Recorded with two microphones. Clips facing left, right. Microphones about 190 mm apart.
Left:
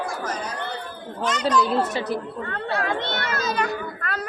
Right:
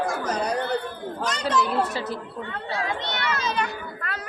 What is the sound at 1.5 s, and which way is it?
Speech, 20° left (ahead or behind).